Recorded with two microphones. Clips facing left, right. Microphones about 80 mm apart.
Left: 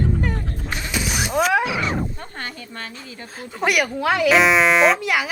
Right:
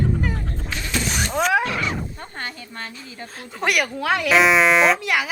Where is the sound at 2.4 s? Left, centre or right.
Right.